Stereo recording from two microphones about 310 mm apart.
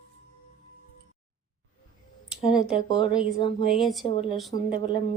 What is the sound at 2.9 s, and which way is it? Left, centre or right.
Speech, centre.